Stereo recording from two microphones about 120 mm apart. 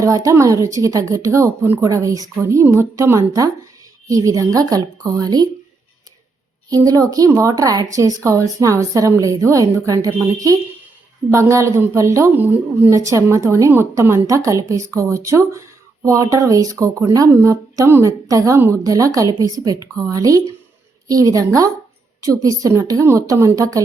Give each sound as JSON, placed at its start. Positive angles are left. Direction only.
{"t": 0.0, "sound": "a woman's voice", "side_deg": -30}
{"t": 6.7, "sound": "a woman's voice", "side_deg": -30}